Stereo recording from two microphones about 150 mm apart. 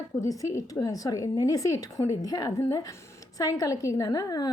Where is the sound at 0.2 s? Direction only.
20° left (ahead or behind).